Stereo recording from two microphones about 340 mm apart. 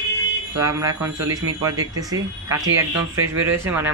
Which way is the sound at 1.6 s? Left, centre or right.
Centre.